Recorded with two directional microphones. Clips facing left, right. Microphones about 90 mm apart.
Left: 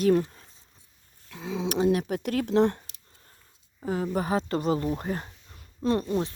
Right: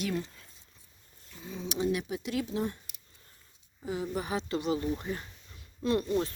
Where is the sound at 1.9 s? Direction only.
50° left (ahead or behind).